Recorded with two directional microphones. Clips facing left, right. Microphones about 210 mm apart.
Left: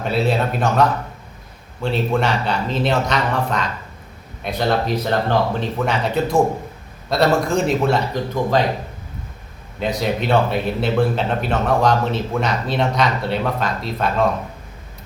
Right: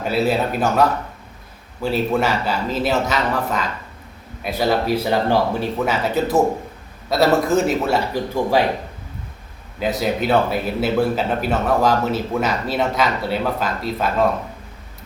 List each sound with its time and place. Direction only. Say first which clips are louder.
0.0 s a man's voice: even; 5° right (ahead or behind)
10.0 s a man's voice: even; centre (ahead or behind)